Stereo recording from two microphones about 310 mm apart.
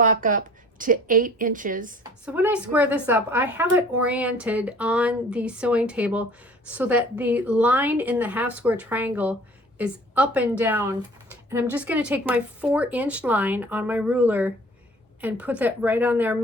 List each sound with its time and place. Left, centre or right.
0.0 s a woman's voice: right
2.2 s speech: centre